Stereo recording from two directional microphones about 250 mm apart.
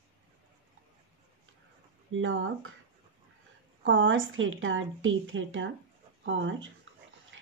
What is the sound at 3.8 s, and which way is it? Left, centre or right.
Speech, right.